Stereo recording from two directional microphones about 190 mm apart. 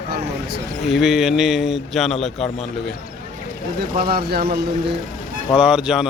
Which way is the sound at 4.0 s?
55° right (ahead or behind).